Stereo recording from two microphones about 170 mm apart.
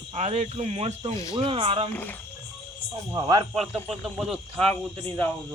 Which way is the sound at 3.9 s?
Centre (ahead or behind).